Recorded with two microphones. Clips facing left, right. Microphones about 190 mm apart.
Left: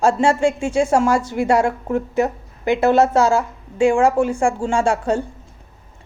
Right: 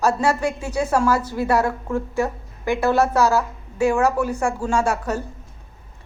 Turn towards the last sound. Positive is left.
turn(degrees=30)  # may be behind; listen again after turning